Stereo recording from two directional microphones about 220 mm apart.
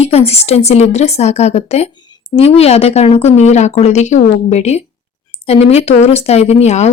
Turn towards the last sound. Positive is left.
turn(degrees=30)  # may be behind; listen again after turning